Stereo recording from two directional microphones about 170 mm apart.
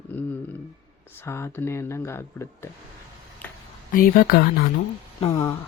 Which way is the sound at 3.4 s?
10° left (ahead or behind).